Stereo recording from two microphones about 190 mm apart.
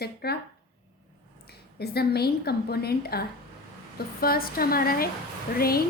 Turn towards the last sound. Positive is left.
turn(degrees=50)  # may be behind; listen again after turning